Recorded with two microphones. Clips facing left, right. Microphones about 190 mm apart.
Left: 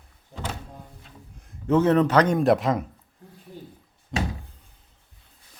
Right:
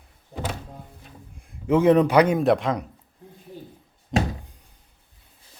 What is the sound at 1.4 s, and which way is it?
A man's voice, 10° right (ahead or behind).